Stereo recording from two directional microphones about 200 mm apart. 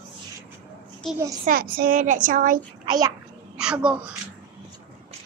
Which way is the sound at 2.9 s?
15° right (ahead or behind).